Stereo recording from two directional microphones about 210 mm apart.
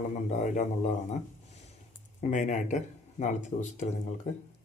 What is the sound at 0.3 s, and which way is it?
Speech, 35° left (ahead or behind).